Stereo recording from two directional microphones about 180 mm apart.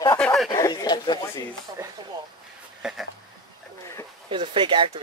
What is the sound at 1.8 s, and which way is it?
Speech, 15° right (ahead or behind).